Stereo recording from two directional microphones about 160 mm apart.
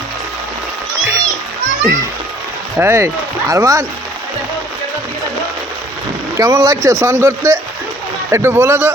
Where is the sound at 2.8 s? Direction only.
15° right (ahead or behind).